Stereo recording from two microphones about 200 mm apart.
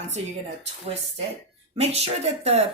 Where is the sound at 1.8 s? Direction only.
30° right (ahead or behind).